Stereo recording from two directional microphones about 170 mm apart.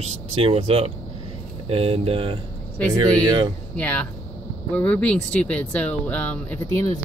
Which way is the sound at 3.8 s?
5° left (ahead or behind).